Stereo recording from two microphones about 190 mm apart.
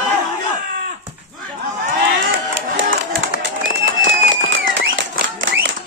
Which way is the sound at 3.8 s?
75° right (ahead or behind).